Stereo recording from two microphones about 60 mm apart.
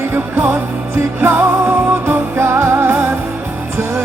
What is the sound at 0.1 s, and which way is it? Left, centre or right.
Music, right.